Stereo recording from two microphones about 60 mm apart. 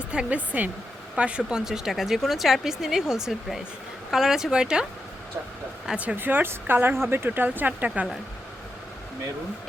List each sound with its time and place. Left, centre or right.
0.1 s speech: centre
6.1 s speech: right
7.3 s speech: right